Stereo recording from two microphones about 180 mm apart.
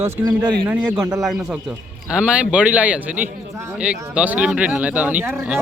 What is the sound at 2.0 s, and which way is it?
Speech, 5° right (ahead or behind).